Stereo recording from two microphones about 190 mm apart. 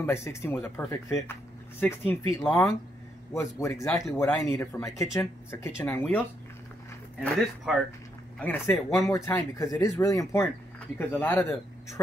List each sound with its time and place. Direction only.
0.0 s speech: 15° left (ahead or behind)
3.7 s speech: centre (ahead or behind)